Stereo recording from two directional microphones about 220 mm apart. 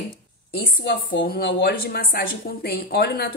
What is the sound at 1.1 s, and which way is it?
Speech, 45° left (ahead or behind).